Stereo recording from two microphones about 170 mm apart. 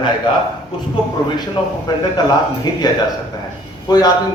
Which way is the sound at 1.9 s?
25° left (ahead or behind).